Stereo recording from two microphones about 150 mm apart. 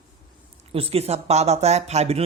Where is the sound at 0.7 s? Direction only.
40° right (ahead or behind).